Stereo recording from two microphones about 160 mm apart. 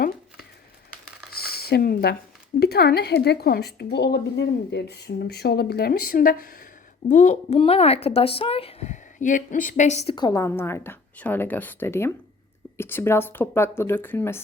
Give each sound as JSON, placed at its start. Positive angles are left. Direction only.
{"t": 1.3, "sound": "a sound", "side_deg": 75}
{"t": 2.6, "sound": "speech", "side_deg": 90}
{"t": 7.1, "sound": "a woman's voice", "side_deg": 50}
{"t": 7.6, "sound": "a woman's voice", "side_deg": 40}
{"t": 10.2, "sound": "a woman's voice", "side_deg": 25}